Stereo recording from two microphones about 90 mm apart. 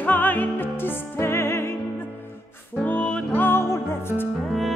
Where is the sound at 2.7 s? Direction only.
15° left (ahead or behind).